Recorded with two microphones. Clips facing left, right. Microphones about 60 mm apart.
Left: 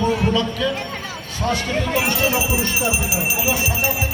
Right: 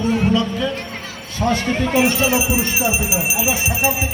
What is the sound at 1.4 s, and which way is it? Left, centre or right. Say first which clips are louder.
Speech: right 3 dB; centre.